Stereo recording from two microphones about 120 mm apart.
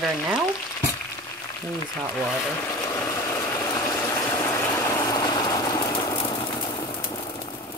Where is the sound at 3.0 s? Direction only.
20° left (ahead or behind); by 6.3 s 40° left (ahead or behind).